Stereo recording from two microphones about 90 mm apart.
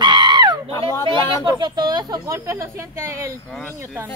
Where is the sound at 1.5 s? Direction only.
50° right (ahead or behind); by 3.2 s 30° right (ahead or behind).